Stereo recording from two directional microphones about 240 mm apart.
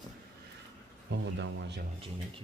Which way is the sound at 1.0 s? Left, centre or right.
Right.